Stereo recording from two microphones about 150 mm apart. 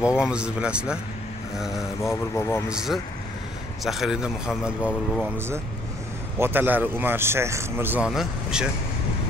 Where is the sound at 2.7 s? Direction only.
5° right (ahead or behind).